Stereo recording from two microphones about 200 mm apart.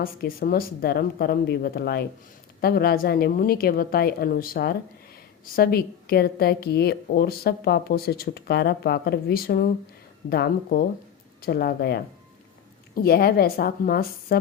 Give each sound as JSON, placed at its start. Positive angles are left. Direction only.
{"t": 0.0, "sound": "a woman's voice", "side_deg": 50}